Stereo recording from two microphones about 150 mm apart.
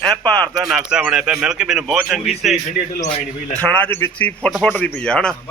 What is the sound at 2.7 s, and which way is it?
Speech, 65° left (ahead or behind).